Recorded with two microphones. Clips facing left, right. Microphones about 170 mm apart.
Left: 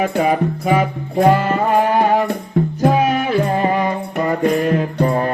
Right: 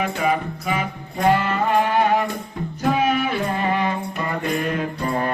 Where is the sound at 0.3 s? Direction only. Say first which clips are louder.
Left 6 dB; 40° left (ahead or behind).